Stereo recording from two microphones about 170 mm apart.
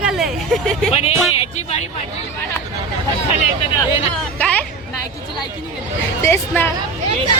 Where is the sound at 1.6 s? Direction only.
40° left (ahead or behind).